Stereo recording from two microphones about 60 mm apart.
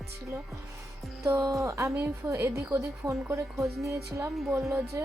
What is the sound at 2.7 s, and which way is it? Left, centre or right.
Speech, right.